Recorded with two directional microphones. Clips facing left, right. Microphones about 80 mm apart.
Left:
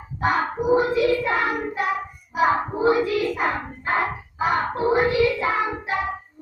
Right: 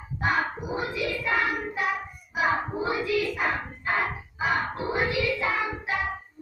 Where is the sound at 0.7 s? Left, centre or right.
Left.